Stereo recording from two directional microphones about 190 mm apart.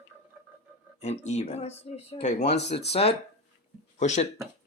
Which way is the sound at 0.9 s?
35° left (ahead or behind).